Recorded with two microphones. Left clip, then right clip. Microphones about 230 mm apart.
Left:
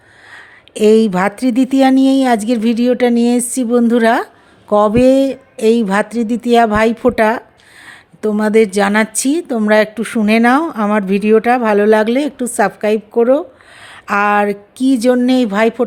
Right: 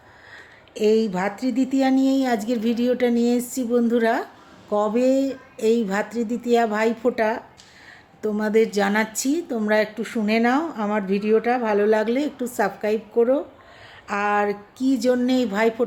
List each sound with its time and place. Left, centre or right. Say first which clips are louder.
0.3 s a woman's voice: left 8 dB; left